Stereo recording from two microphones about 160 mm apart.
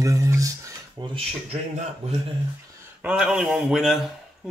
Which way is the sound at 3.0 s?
5° right (ahead or behind).